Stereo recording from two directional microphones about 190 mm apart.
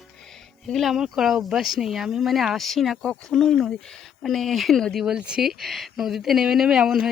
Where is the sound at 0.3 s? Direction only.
Centre (ahead or behind).